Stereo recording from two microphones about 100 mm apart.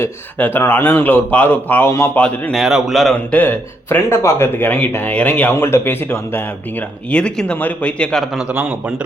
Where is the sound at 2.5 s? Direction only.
5° right (ahead or behind).